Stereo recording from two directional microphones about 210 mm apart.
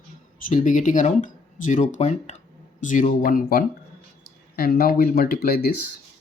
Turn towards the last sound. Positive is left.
turn(degrees=50)  # may be behind; listen again after turning